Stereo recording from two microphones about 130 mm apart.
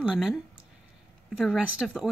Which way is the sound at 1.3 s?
5° right (ahead or behind).